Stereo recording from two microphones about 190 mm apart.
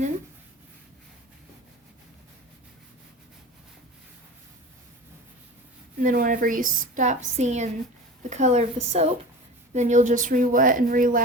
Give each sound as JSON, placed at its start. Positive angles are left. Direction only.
{"t": 6.0, "sound": "a woman's voice", "side_deg": -45}